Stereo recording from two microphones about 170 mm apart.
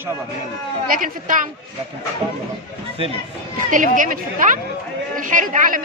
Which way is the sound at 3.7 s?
50° right (ahead or behind).